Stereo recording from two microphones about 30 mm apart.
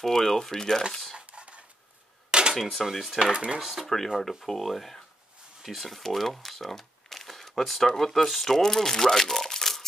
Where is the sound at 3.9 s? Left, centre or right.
Centre.